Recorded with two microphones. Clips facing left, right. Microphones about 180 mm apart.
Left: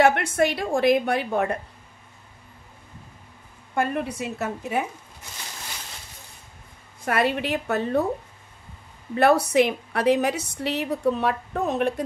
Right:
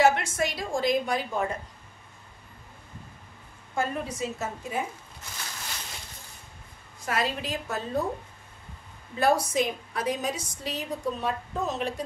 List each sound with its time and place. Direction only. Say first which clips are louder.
0.0 s a woman's voice: left 4 dB; 60° left (ahead or behind)
3.7 s a woman's voice: left 5 dB; 60° left (ahead or behind)
7.1 s a woman's voice: left 6 dB; 60° left (ahead or behind)
9.1 s a woman's voice: left 6 dB; 65° left (ahead or behind)